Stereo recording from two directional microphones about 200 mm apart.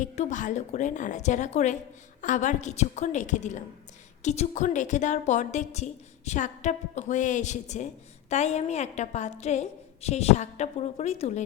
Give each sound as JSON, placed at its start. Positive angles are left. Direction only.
{"t": 0.0, "sound": "a woman's voice", "side_deg": 40}